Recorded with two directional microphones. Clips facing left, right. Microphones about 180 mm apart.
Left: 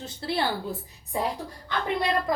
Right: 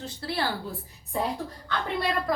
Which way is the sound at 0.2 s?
25° left (ahead or behind).